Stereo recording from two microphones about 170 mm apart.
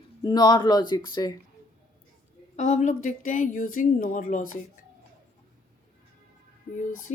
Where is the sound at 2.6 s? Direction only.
45° left (ahead or behind).